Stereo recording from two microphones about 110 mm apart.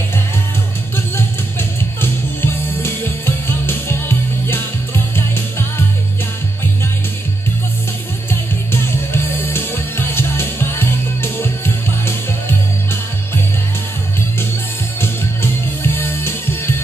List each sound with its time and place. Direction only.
0.9 s music: 20° left (ahead or behind)
4.5 s music: 20° left (ahead or behind)
9.1 s music: 20° left (ahead or behind)
15.0 s music: 20° left (ahead or behind)